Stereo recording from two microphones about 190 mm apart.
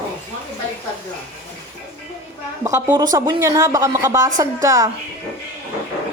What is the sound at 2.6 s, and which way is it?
Speech, 15° right (ahead or behind).